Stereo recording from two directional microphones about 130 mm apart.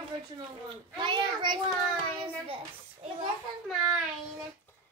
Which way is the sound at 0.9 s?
35° right (ahead or behind).